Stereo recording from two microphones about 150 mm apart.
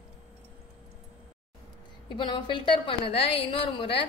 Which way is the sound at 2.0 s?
30° left (ahead or behind).